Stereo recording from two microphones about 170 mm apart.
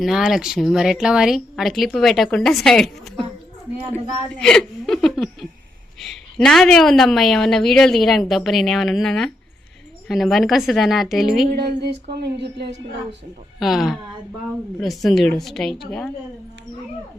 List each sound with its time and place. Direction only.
0.0 s a woman's voice: centre (ahead or behind)
11.5 s speech: 75° right (ahead or behind)
12.6 s a woman's voice: 40° right (ahead or behind)
13.6 s a woman's voice: centre (ahead or behind)